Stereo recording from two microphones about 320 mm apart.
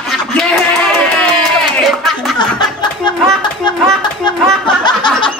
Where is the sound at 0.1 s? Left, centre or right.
Centre.